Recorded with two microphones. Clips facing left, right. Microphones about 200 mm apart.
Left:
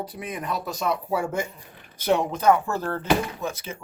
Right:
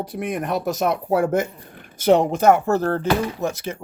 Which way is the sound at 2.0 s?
80° right.